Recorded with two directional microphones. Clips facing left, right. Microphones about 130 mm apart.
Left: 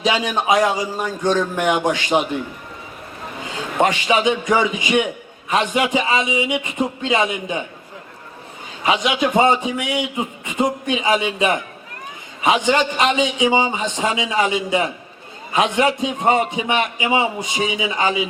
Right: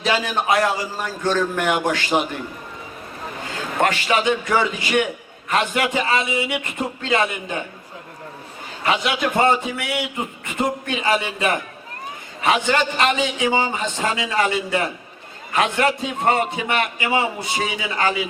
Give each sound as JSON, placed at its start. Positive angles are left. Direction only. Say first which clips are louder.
{"t": 0.0, "sound": "a man's voice", "louder": "left 2 dB", "side_deg": 15}
{"t": 3.8, "sound": "a man's voice", "louder": "left 2 dB", "side_deg": 15}
{"t": 8.8, "sound": "a man's voice", "louder": "left 2 dB", "side_deg": 15}
{"t": 12.6, "sound": "a man's voice", "louder": "left 2 dB", "side_deg": 15}